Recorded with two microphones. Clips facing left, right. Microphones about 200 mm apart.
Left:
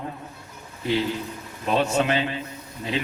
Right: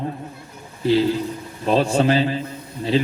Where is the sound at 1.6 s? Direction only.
35° right (ahead or behind).